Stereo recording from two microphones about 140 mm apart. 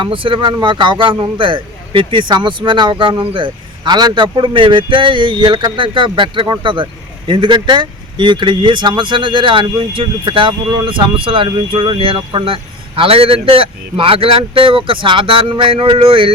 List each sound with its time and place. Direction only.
0.0 s speech: 40° right (ahead or behind)